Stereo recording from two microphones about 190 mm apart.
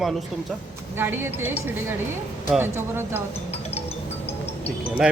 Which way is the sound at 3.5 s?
30° left (ahead or behind).